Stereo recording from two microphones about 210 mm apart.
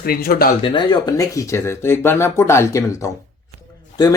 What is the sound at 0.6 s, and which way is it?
Speech, 20° left (ahead or behind).